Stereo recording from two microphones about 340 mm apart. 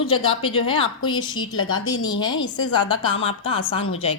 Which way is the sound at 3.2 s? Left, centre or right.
Centre.